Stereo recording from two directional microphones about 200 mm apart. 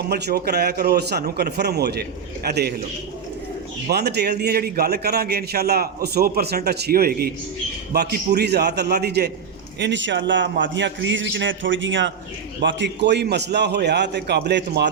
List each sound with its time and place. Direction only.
0.1 s a man's voice: 55° right (ahead or behind)
3.9 s a man's voice: 55° right (ahead or behind)